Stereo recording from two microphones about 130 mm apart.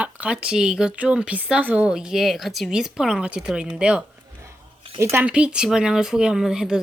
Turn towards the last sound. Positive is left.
turn(degrees=-5)  # may be behind; listen again after turning